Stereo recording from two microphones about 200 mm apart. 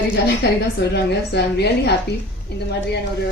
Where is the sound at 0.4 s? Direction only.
55° left (ahead or behind).